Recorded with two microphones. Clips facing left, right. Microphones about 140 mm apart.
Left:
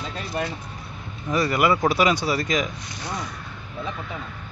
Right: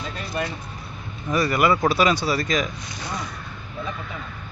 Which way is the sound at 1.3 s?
20° left (ahead or behind).